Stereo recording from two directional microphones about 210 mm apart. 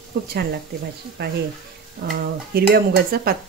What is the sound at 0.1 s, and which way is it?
Speech, 50° right (ahead or behind).